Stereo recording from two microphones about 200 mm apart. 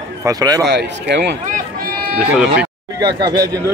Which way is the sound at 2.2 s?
5° right (ahead or behind).